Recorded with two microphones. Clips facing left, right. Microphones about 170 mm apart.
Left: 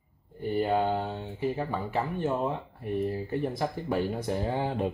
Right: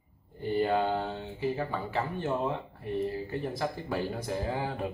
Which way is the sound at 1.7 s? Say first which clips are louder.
Left 2 dB; 15° left (ahead or behind).